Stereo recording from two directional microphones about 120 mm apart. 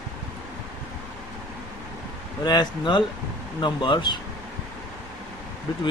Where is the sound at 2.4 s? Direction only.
35° left (ahead or behind).